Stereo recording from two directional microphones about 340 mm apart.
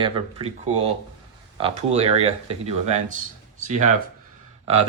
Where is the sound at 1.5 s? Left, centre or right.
Centre.